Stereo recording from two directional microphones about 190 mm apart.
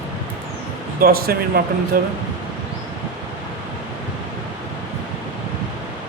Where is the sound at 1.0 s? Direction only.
50° right (ahead or behind).